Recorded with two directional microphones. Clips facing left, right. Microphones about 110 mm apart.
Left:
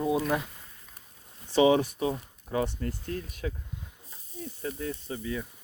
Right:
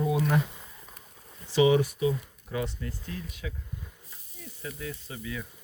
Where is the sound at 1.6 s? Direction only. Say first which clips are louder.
Even; 35° left (ahead or behind).